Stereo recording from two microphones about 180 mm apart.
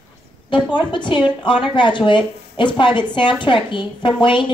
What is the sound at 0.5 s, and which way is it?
A woman's voice, 25° left (ahead or behind).